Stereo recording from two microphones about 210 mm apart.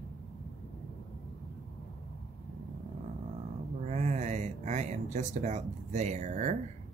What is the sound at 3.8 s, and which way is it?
Speech, 35° right (ahead or behind).